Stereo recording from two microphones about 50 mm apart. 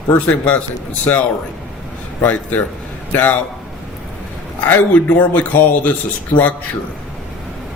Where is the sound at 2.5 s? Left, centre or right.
Left.